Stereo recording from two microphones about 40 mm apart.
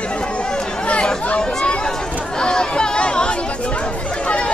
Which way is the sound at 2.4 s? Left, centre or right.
Left.